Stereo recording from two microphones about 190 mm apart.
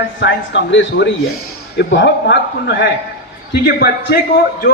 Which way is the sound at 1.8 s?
60° left (ahead or behind).